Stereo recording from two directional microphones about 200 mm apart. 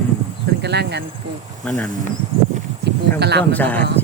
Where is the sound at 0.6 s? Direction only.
55° right (ahead or behind).